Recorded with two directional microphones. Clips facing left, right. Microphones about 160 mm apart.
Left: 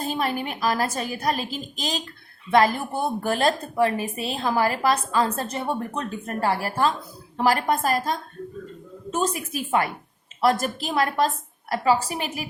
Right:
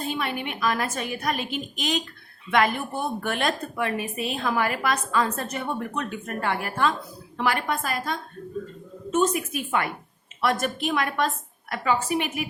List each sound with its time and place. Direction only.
0.0 s a woman's voice: 40° left (ahead or behind)